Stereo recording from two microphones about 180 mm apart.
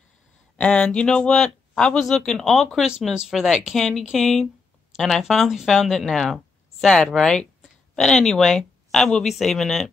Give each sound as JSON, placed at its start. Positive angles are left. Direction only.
{"t": 0.6, "sound": "speech", "side_deg": 5}